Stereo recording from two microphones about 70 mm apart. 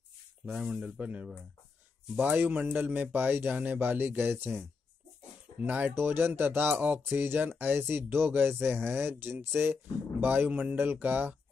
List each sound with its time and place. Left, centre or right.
0.7 s a man's voice: centre; by 4.6 s right
5.6 s a man's voice: right